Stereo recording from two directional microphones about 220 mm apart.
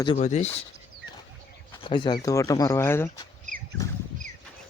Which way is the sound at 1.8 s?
20° left (ahead or behind).